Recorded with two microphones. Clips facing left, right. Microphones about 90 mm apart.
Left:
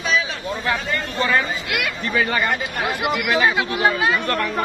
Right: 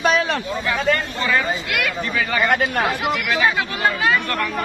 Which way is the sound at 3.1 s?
15° left (ahead or behind).